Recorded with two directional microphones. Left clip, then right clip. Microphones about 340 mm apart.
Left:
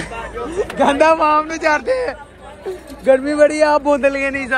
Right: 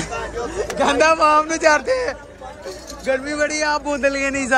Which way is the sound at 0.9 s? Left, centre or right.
Centre.